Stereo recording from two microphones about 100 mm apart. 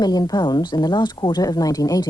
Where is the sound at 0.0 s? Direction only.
40° left (ahead or behind).